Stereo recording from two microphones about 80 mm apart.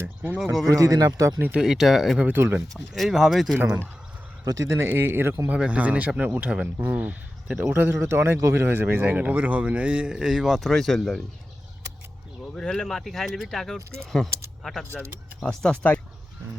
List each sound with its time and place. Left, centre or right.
0.0 s speech: right
0.8 s speech: right
1.4 s speech: right
1.6 s speech: centre
2.2 s speech: right
2.9 s speech: centre
3.6 s speech: right
4.4 s speech: right
5.5 s speech: centre
12.5 s speech: centre